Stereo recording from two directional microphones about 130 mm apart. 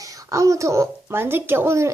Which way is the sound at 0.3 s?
25° right (ahead or behind).